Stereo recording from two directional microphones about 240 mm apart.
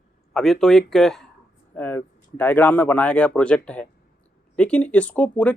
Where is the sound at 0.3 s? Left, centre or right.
Centre.